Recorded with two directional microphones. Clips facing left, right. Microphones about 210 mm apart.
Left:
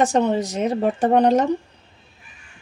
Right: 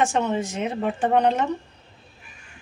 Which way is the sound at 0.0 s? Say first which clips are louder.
Left 4 dB; 35° left (ahead or behind).